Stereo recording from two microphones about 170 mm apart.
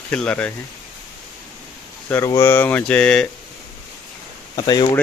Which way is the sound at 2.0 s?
15° left (ahead or behind).